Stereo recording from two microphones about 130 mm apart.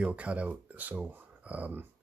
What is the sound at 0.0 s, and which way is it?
Speech, 10° right (ahead or behind).